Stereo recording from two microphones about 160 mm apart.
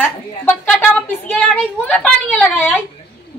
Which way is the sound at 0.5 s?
10° left (ahead or behind).